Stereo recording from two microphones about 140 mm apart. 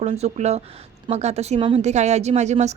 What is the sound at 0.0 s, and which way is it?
A woman's voice, 50° right (ahead or behind).